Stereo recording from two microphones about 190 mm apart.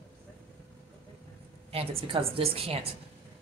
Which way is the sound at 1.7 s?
30° right (ahead or behind).